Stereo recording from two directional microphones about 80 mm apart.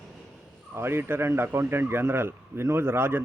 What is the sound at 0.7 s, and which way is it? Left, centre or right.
Speech, right.